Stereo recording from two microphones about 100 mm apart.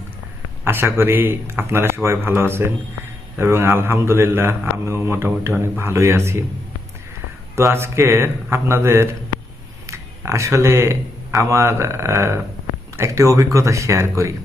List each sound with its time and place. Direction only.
0.6 s speech: 25° right (ahead or behind)
7.5 s speech: 25° right (ahead or behind)